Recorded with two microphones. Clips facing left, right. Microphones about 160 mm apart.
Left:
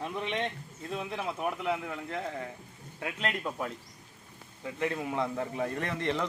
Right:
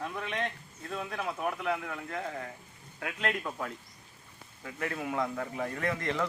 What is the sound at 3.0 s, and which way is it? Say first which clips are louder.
A man's voice: even; 25° left (ahead or behind).